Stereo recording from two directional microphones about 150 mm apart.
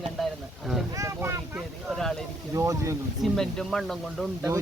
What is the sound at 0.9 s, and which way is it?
Speech, 20° right (ahead or behind).